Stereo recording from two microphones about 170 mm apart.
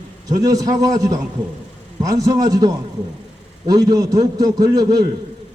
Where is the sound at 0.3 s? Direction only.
20° right (ahead or behind).